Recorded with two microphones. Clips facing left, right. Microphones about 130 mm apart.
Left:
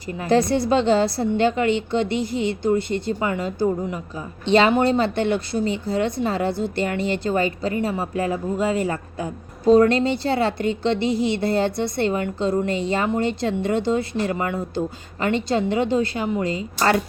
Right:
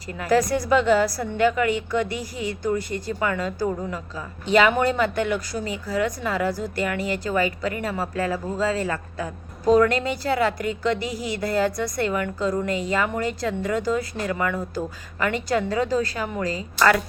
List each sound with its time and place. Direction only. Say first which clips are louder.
0.2 s a woman's voice: left 2 dB; 25° left (ahead or behind)